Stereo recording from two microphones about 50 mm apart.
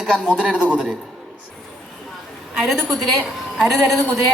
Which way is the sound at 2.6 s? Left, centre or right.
Centre.